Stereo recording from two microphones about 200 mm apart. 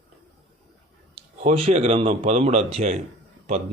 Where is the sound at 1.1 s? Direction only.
30° right (ahead or behind).